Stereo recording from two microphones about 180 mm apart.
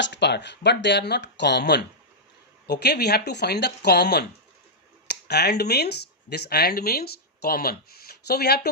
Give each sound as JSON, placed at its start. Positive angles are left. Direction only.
{"t": 0.0, "sound": "speech", "side_deg": 70}